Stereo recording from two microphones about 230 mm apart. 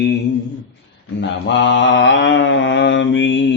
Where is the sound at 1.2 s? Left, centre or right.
Left.